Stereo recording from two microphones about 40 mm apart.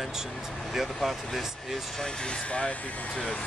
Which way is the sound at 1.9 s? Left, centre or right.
Left.